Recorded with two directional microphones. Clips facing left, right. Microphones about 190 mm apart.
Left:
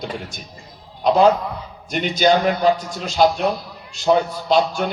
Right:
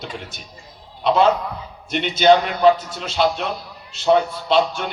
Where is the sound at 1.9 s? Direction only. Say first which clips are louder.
Right 2 dB; 45° left (ahead or behind).